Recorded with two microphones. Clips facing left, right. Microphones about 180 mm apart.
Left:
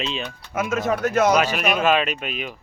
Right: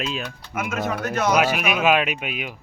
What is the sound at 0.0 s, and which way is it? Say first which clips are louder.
Speech: even; 5° right (ahead or behind).